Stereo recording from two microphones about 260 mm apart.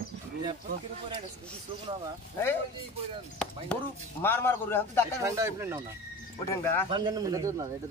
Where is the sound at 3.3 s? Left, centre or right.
Centre.